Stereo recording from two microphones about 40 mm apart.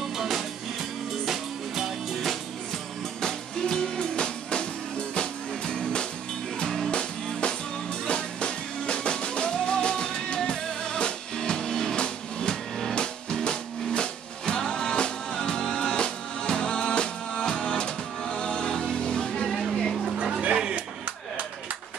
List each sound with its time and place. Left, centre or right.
0.0 s music: centre
3.2 s music: centre
6.6 s music: centre
6.9 s music: left
19.8 s vehicle: centre